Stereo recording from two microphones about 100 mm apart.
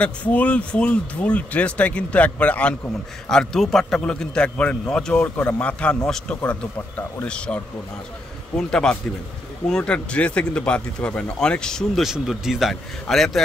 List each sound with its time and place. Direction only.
0.0 s speech: 15° left (ahead or behind)
3.3 s a man's voice: 5° left (ahead or behind)